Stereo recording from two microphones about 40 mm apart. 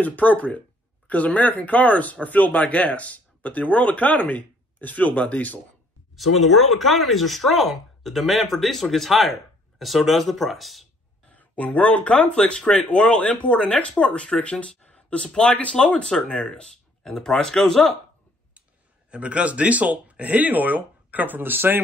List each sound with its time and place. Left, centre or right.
0.0 s speech: left
6.1 s speech: centre
11.3 s speech: left
15.2 s speech: centre
16.2 s speech: left
17.0 s speech: centre
19.0 s speech: right